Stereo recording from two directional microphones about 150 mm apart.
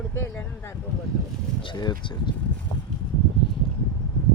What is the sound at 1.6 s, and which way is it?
Speech, 30° left (ahead or behind).